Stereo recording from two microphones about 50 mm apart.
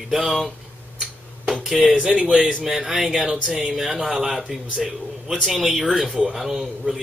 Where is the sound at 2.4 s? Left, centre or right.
Centre.